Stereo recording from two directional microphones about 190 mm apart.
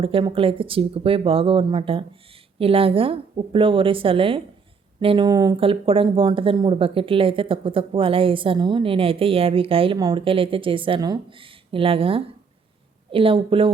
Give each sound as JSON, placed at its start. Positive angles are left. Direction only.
{"t": 0.0, "sound": "speech", "side_deg": -30}